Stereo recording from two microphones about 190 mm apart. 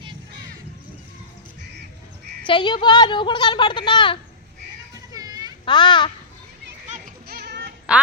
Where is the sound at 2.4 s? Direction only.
25° left (ahead or behind).